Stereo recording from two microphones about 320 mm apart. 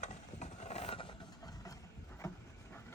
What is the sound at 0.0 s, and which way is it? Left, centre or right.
Vehicle, left.